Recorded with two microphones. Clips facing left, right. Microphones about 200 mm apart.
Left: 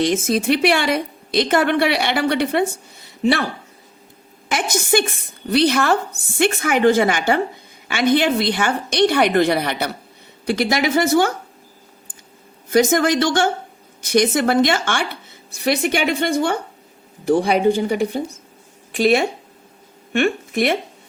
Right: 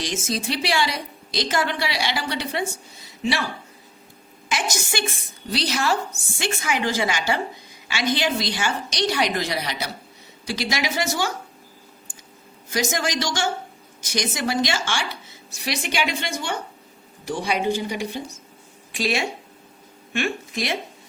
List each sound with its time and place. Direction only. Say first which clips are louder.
0.0 s a woman's voice: left 9 dB; 60° left (ahead or behind)
12.7 s a woman's voice: left 9 dB; 55° left (ahead or behind)